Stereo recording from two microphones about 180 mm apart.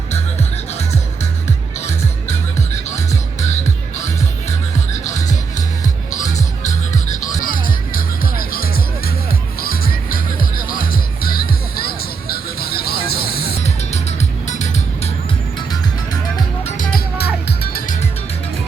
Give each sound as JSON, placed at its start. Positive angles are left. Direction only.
{"t": 0.7, "sound": "music", "side_deg": 40}
{"t": 5.5, "sound": "music", "side_deg": 20}
{"t": 6.2, "sound": "music", "side_deg": 40}
{"t": 14.4, "sound": "music", "side_deg": 40}
{"t": 16.6, "sound": "music", "side_deg": 45}